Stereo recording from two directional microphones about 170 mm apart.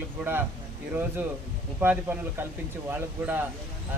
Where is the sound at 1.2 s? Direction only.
10° right (ahead or behind).